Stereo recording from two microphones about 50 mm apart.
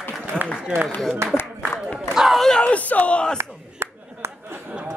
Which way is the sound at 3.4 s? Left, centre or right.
Right.